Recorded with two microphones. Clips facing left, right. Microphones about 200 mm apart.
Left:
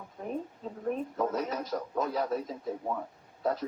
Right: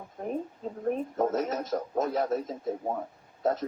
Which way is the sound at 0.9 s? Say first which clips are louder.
Right 3 dB; 45° right (ahead or behind).